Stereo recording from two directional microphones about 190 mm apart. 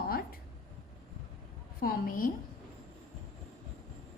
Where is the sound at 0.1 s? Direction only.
50° left (ahead or behind).